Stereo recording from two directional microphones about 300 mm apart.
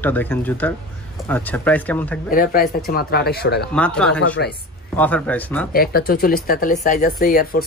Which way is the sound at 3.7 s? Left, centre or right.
Centre.